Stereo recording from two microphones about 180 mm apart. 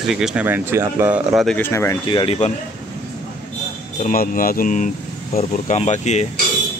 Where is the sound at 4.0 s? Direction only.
50° left (ahead or behind).